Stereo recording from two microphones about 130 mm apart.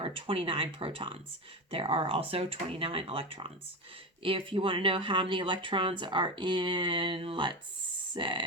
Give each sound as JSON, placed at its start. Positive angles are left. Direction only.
{"t": 0.0, "sound": "speech", "side_deg": -45}